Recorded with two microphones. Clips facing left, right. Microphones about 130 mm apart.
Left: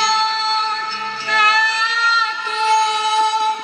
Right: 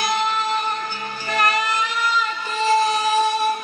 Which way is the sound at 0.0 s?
45° right (ahead or behind).